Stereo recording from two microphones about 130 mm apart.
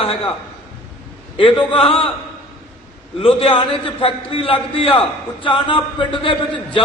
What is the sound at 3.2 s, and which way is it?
A man's voice, 45° left (ahead or behind).